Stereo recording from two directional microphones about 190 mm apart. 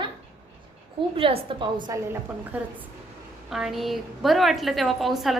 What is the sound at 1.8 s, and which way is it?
A woman's voice, 15° right (ahead or behind).